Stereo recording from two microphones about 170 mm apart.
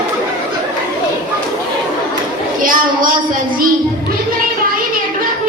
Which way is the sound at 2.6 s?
55° right (ahead or behind).